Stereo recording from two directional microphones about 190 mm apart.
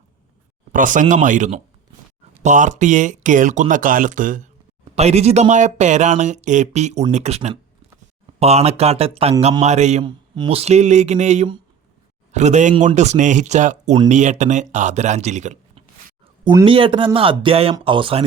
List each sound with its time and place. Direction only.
0.7 s speech: 45° right (ahead or behind)
10.0 s speech: 25° right (ahead or behind)
16.6 s speech: 25° right (ahead or behind)